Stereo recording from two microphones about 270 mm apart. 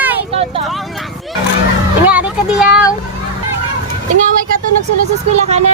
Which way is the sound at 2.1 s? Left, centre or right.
Centre.